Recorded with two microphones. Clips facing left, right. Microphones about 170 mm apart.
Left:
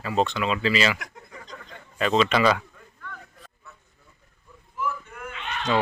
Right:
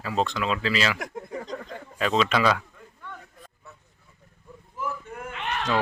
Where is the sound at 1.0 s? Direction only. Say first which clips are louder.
Right 9 dB; 45° right (ahead or behind).